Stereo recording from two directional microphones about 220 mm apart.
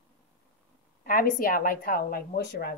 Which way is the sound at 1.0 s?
40° left (ahead or behind).